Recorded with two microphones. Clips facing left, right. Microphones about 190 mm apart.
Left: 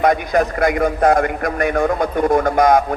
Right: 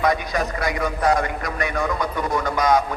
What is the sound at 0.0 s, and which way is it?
A man's voice, 55° left (ahead or behind).